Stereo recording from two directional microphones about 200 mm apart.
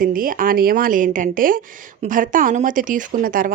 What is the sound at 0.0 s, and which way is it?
Speech, 45° right (ahead or behind).